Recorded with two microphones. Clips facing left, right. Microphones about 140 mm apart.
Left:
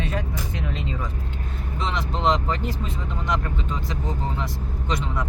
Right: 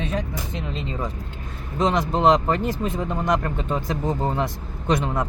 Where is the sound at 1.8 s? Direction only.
45° right (ahead or behind).